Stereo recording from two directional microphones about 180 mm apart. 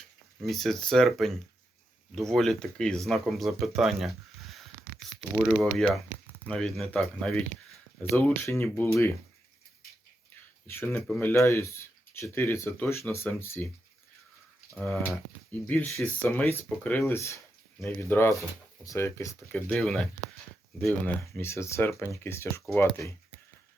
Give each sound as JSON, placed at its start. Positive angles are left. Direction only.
{"t": 0.4, "sound": "speech", "side_deg": 0}
{"t": 8.1, "sound": "speech", "side_deg": 15}
{"t": 10.9, "sound": "speech", "side_deg": 10}
{"t": 14.8, "sound": "speech", "side_deg": 0}